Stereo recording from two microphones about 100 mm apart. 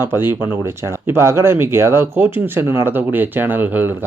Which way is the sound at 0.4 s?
25° right (ahead or behind).